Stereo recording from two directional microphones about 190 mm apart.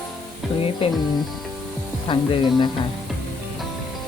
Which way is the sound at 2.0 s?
25° left (ahead or behind).